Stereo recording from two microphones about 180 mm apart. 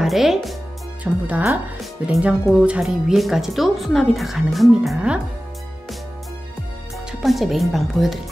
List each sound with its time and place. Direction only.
0.0 s speech: centre (ahead or behind)
7.1 s speech: centre (ahead or behind)